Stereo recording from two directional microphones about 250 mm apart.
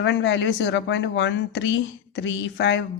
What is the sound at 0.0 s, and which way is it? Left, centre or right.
Speech, left.